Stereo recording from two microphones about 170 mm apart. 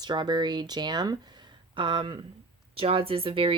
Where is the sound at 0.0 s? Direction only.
25° right (ahead or behind).